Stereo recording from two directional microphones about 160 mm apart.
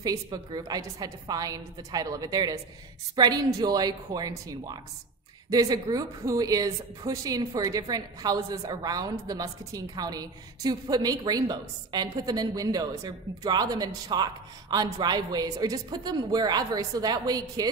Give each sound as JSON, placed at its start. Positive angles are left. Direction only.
{"t": 0.0, "sound": "a woman's voice", "side_deg": -25}